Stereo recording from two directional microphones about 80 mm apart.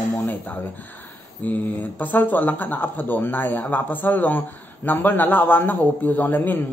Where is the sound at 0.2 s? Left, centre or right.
Left.